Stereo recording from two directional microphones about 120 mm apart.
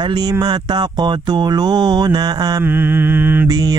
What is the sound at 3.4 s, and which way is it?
Mantra, 30° right (ahead or behind).